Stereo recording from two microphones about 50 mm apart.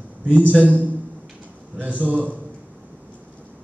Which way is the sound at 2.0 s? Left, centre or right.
Right.